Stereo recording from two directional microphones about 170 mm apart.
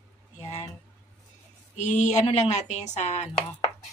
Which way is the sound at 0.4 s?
40° left (ahead or behind).